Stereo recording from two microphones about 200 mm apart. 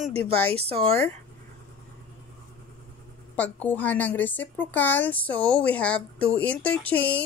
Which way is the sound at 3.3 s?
10° left (ahead or behind).